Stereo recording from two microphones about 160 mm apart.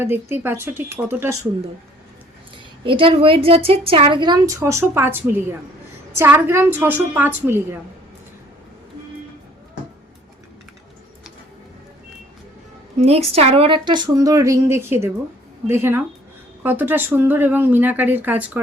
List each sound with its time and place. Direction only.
0.0 s speech: 15° right (ahead or behind)
2.8 s a woman's voice: 35° right (ahead or behind); by 7.8 s 15° right (ahead or behind)
13.0 s speech: 40° right (ahead or behind); by 18.6 s 10° right (ahead or behind)